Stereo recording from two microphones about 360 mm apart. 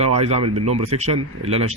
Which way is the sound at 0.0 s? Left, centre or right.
Centre.